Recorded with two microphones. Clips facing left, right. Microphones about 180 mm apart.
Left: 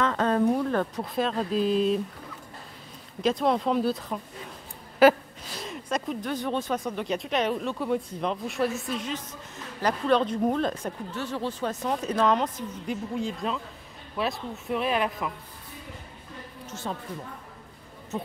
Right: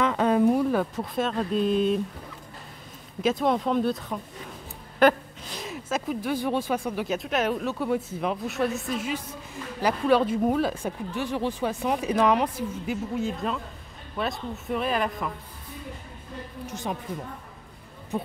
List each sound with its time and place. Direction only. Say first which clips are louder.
0.0 s speech: right 2 dB; 10° right (ahead or behind)
3.2 s speech: even; centre (ahead or behind)
16.6 s speech: right 2 dB; 15° right (ahead or behind)